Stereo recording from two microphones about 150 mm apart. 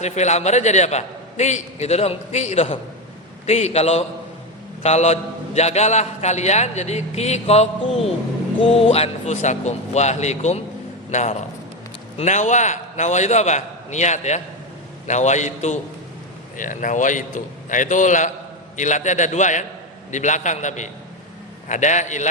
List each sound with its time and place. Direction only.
0.0 s a man's voice: 50° left (ahead or behind)